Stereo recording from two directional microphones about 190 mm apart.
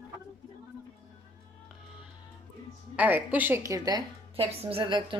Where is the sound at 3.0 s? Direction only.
10° right (ahead or behind).